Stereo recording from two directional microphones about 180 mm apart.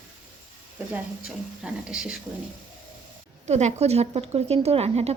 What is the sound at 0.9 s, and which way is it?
Speech, 5° right (ahead or behind).